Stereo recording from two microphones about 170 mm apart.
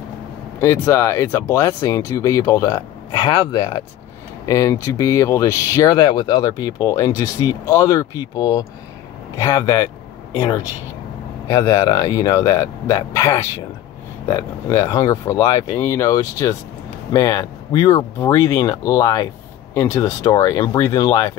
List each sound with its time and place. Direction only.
0.6 s speech: 15° left (ahead or behind)
11.4 s speech: 20° left (ahead or behind)